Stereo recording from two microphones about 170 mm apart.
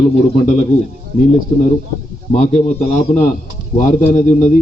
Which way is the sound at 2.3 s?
40° left (ahead or behind).